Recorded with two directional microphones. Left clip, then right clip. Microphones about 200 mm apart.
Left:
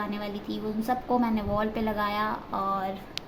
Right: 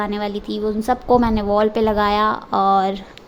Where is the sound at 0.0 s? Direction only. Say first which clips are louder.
Right 10 dB; 50° right (ahead or behind).